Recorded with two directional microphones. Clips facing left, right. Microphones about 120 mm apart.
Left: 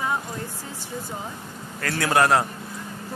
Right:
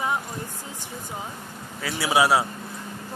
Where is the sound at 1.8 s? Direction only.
10° right (ahead or behind).